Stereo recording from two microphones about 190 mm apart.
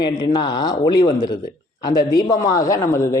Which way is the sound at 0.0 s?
20° left (ahead or behind).